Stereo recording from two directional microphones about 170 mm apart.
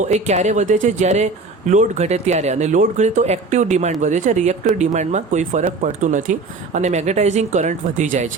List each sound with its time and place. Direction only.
0.0 s speech: 45° right (ahead or behind)